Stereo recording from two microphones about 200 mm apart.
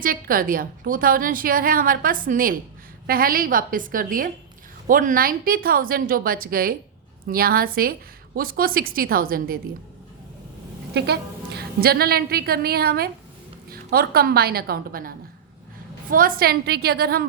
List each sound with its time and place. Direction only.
0.0 s a woman's voice: 45° right (ahead or behind)
10.9 s a woman's voice: 55° right (ahead or behind)